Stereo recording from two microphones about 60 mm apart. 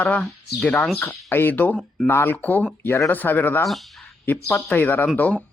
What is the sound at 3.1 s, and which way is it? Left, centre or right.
Speech, left.